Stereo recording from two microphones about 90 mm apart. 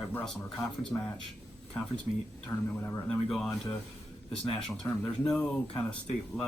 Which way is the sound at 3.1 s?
10° left (ahead or behind).